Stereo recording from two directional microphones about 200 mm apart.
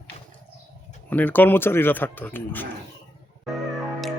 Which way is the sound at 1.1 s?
10° left (ahead or behind).